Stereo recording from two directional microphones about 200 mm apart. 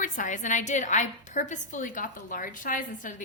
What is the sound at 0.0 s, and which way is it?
A woman's voice, 40° left (ahead or behind).